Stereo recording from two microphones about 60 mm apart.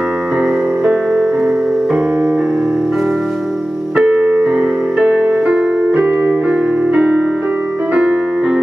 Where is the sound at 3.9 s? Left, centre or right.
Centre.